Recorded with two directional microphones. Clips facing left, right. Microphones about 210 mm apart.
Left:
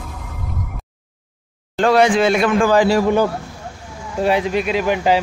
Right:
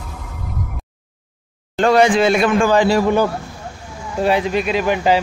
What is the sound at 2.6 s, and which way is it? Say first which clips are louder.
Speech: even; 5° left (ahead or behind).